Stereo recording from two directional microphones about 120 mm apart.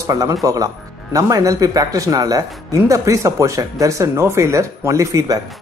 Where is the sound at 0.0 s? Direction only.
30° right (ahead or behind).